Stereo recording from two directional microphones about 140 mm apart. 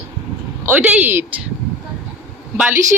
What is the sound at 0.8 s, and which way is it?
Speech, 15° right (ahead or behind).